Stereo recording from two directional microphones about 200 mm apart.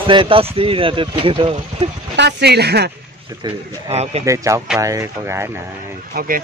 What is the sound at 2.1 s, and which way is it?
Speech, 55° right (ahead or behind).